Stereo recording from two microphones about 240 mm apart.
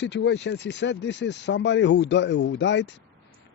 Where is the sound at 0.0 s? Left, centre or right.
Left.